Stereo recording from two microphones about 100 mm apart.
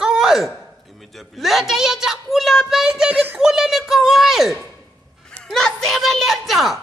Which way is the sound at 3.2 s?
15° right (ahead or behind).